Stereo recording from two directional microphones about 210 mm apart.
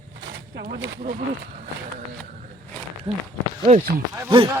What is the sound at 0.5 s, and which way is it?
Speech, 45° right (ahead or behind).